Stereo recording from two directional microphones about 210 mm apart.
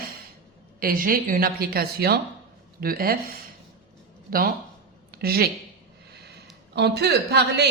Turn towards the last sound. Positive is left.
turn(degrees=-50)  # may be behind; listen again after turning